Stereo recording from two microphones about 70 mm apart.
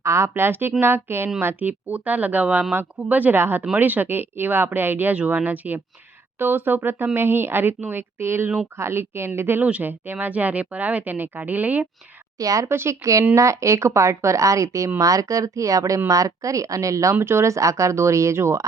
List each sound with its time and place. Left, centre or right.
0.0 s speech: right
9.6 s speech: right
12.4 s speech: right
12.6 s a woman's voice: right
17.2 s a woman's voice: right